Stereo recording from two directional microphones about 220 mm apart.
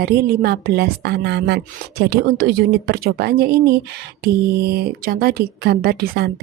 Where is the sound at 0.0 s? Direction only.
45° right (ahead or behind).